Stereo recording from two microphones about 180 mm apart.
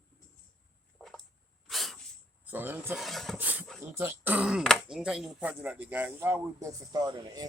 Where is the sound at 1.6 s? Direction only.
Centre (ahead or behind).